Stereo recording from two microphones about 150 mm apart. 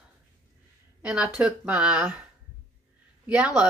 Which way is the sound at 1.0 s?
5° right (ahead or behind).